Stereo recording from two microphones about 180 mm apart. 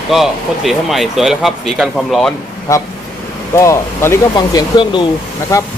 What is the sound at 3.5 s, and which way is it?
Speech, 15° left (ahead or behind).